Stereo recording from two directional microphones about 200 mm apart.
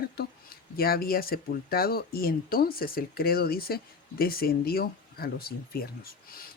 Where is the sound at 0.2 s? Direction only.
50° left (ahead or behind).